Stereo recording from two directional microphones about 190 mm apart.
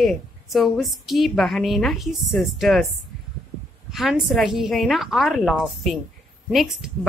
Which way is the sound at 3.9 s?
Centre (ahead or behind).